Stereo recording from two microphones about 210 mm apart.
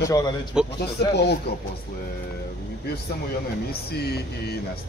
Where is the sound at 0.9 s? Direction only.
50° left (ahead or behind).